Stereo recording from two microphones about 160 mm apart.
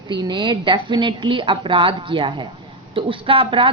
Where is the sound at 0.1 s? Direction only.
30° right (ahead or behind).